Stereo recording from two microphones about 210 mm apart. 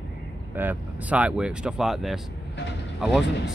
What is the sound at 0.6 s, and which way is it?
Speech, 10° right (ahead or behind).